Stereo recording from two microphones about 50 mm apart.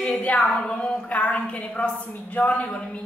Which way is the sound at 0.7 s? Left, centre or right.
Centre.